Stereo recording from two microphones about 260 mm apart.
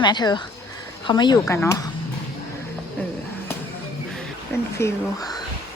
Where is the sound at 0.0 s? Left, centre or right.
Centre.